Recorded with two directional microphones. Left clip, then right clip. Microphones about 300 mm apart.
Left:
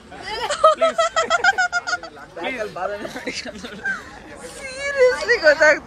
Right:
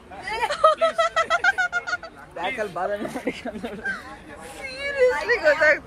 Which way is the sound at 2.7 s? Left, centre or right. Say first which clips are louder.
Even; right.